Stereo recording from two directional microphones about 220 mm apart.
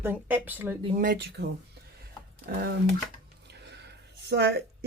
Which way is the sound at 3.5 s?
50° right (ahead or behind).